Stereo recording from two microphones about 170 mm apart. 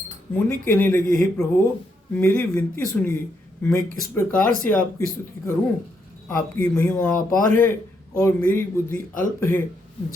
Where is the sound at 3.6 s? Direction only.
10° left (ahead or behind).